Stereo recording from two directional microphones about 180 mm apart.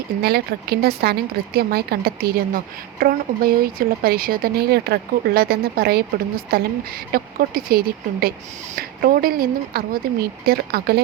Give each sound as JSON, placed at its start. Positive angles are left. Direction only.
{"t": 0.2, "sound": "speech", "side_deg": -65}